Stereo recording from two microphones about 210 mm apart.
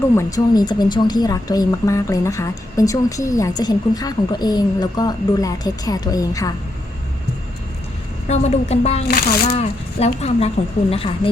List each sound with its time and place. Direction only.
0.2 s a woman's voice: 20° left (ahead or behind)
8.3 s speech: 30° left (ahead or behind)